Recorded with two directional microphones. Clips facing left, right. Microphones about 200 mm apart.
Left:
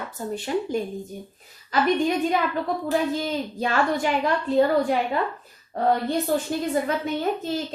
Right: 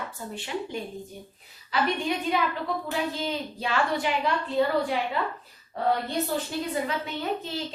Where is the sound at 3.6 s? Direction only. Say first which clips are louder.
Left 4 dB; 45° left (ahead or behind).